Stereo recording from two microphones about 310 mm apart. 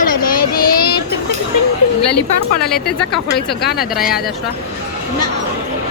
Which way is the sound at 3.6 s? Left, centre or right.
Left.